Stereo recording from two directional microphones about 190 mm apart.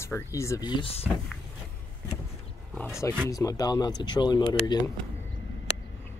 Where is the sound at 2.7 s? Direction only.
5° left (ahead or behind).